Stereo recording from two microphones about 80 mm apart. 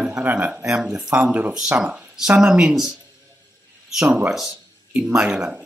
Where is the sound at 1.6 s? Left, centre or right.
Centre.